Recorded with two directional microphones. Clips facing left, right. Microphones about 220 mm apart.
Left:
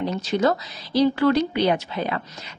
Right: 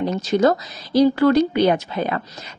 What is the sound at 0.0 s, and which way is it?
A woman's voice, 45° right (ahead or behind).